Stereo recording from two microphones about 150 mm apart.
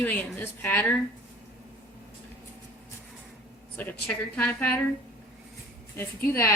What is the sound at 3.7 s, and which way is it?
Speech, 10° left (ahead or behind).